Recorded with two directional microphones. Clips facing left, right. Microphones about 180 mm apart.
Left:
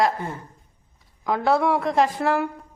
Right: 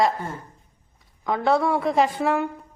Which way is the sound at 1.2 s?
Centre (ahead or behind).